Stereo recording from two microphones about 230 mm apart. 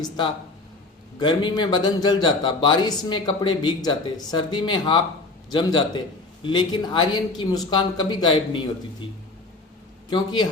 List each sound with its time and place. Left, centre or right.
1.2 s speech: centre
10.1 s a man's voice: centre